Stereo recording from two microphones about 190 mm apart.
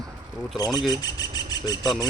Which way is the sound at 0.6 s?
20° left (ahead or behind).